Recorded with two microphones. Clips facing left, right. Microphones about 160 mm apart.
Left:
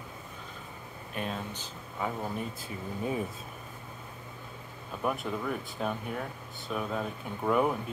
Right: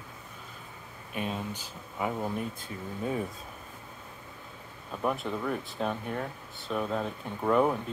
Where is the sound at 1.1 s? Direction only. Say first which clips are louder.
Right 2 dB; 5° right (ahead or behind).